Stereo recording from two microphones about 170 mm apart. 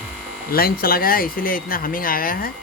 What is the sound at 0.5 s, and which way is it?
Speech, 60° left (ahead or behind).